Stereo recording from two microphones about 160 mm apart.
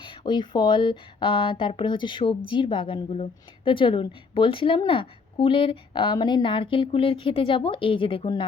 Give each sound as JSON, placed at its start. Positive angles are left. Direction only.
{"t": 0.0, "sound": "a woman's voice", "side_deg": 30}